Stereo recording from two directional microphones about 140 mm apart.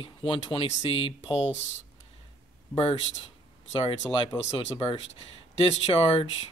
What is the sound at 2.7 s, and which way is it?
Speech, 40° left (ahead or behind).